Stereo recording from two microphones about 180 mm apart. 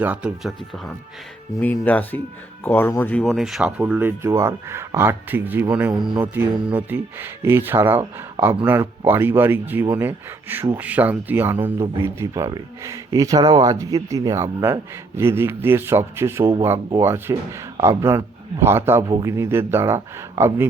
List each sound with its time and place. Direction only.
0.0 s speech: 5° right (ahead or behind)
1.6 s speech: 10° left (ahead or behind); by 5.9 s 10° right (ahead or behind)
5.9 s speech: 25° right (ahead or behind)
6.1 s speech: 10° right (ahead or behind)